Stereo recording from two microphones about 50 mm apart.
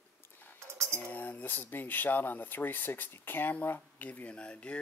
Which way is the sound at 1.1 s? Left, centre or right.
Left.